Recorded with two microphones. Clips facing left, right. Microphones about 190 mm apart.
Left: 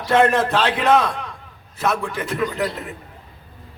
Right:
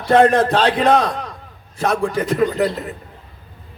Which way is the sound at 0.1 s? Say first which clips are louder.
Right 4 dB; 35° right (ahead or behind).